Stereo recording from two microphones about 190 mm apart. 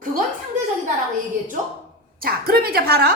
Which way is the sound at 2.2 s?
50° right (ahead or behind).